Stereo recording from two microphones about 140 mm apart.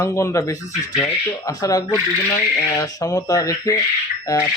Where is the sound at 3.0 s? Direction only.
25° left (ahead or behind).